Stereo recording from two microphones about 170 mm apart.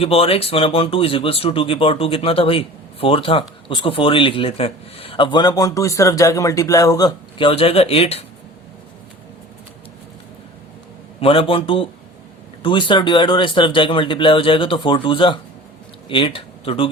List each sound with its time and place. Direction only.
0.0 s speech: 35° left (ahead or behind)
11.2 s speech: 30° left (ahead or behind)